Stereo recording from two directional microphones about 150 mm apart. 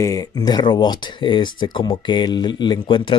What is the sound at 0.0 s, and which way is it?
Speech, 25° left (ahead or behind).